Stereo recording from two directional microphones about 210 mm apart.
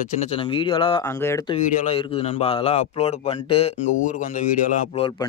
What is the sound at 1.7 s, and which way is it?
Speech, 35° left (ahead or behind).